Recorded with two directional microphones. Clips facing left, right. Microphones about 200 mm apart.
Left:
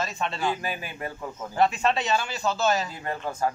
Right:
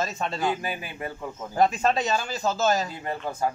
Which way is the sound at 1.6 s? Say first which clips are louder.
Right 1 dB; 40° right (ahead or behind).